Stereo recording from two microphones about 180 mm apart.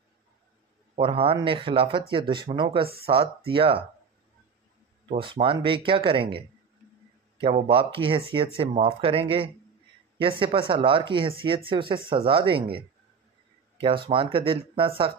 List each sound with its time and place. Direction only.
0.9 s speech: 30° right (ahead or behind)
5.1 s speech: 30° right (ahead or behind)